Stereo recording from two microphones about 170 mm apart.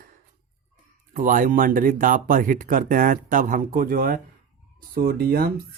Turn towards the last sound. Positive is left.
turn(degrees=-65)  # may be behind; listen again after turning